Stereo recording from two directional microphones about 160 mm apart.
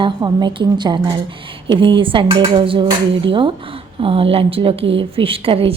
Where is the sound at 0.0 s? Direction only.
25° right (ahead or behind).